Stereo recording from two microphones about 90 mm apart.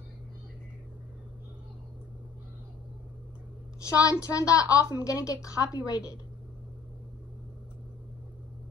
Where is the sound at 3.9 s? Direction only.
35° left (ahead or behind).